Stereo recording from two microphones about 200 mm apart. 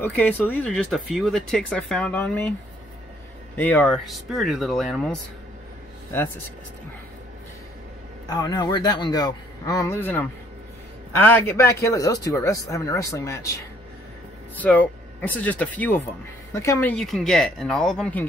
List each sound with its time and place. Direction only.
0.5 s speech: 5° left (ahead or behind)
3.5 s speech: 10° left (ahead or behind)
8.3 s speech: 20° left (ahead or behind)
14.6 s speech: 5° left (ahead or behind)
16.9 s speech: centre (ahead or behind)